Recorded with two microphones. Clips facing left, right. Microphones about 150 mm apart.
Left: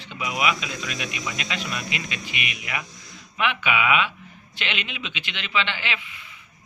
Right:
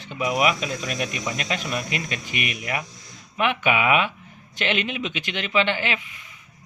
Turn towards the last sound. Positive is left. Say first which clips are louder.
# right 5 dB
turn(degrees=-45)  # may be behind; listen again after turning